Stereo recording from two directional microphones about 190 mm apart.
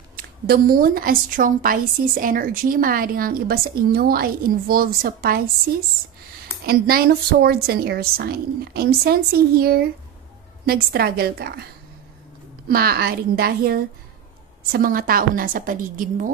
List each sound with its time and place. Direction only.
0.1 s a woman's voice: 50° right (ahead or behind)
6.6 s a woman's voice: 50° right (ahead or behind)
12.6 s a woman's voice: 55° right (ahead or behind)